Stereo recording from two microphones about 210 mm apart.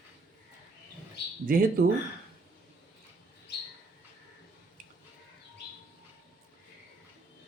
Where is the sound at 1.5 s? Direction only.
45° right (ahead or behind).